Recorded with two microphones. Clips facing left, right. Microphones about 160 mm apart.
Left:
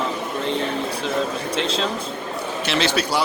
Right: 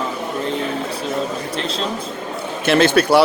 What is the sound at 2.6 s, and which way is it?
Speech, 55° right (ahead or behind).